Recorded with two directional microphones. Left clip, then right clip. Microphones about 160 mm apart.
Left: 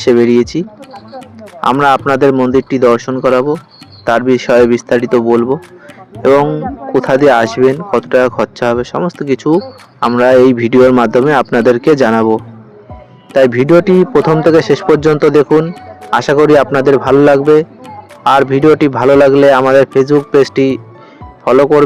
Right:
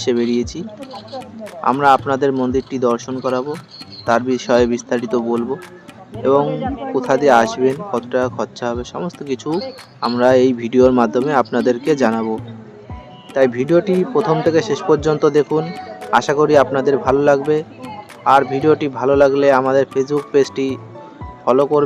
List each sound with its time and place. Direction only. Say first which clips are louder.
0.0 s speech: left 9 dB; 45° left (ahead or behind)
1.6 s speech: left 4 dB; 50° left (ahead or behind)
6.9 s speech: left 5 dB; 45° left (ahead or behind)